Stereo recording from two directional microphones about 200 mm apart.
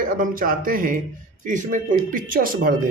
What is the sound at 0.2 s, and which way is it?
Speech, 45° right (ahead or behind).